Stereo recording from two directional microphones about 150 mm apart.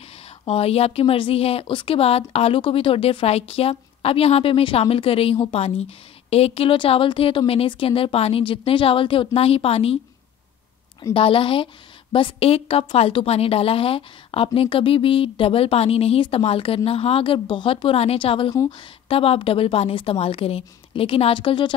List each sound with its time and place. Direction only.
0.5 s a woman's voice: 40° left (ahead or behind)
11.1 s a woman's voice: 35° left (ahead or behind)
18.5 s a woman's voice: 20° left (ahead or behind)
18.8 s a woman's voice: 40° left (ahead or behind)